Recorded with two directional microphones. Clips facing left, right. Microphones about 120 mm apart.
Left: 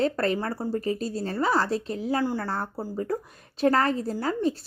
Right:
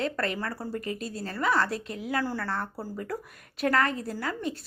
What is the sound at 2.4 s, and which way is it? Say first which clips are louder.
Speech: left 2 dB; 35° left (ahead or behind).